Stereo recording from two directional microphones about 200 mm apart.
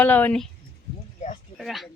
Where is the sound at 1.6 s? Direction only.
Centre (ahead or behind).